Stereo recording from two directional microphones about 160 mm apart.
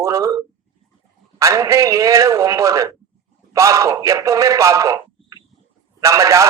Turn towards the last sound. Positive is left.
turn(degrees=-20)  # may be behind; listen again after turning